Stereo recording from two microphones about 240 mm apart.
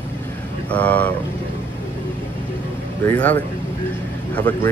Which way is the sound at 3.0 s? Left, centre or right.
Centre.